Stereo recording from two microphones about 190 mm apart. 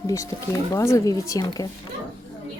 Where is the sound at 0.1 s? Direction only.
15° left (ahead or behind).